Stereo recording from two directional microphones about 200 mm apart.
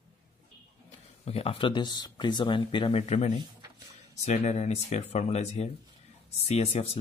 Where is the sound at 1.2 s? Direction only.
30° left (ahead or behind).